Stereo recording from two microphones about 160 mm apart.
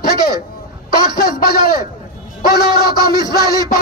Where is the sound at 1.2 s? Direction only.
70° left (ahead or behind).